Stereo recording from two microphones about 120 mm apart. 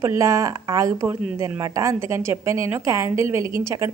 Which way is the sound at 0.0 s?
25° right (ahead or behind).